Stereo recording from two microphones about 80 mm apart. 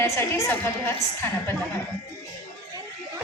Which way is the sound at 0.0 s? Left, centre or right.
Left.